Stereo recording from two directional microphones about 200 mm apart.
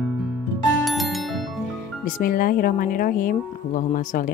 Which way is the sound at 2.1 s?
45° left (ahead or behind).